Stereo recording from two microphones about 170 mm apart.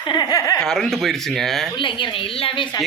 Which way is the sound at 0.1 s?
20° left (ahead or behind).